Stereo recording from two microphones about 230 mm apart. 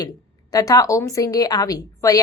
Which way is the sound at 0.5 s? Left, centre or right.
Centre.